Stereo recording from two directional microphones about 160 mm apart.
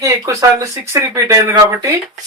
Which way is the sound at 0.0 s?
20° right (ahead or behind).